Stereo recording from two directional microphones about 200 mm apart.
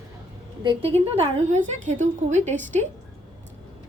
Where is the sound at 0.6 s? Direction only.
30° right (ahead or behind).